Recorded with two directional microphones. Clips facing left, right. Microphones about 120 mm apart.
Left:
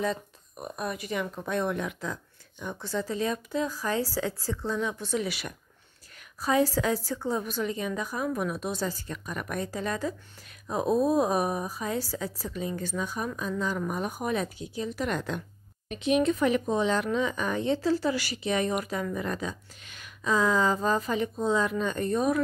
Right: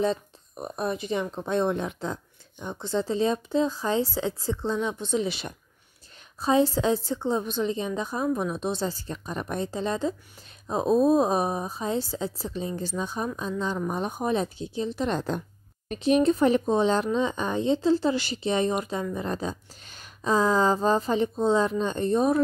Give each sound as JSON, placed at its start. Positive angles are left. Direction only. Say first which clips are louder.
{"t": 0.0, "sound": "a woman's voice", "louder": "right 4 dB", "side_deg": -30}